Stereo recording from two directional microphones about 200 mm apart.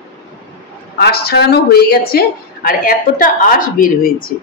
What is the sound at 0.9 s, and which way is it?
A woman's voice, 50° left (ahead or behind).